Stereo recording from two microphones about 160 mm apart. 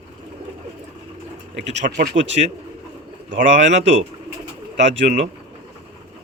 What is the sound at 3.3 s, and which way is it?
Speech, 50° right (ahead or behind).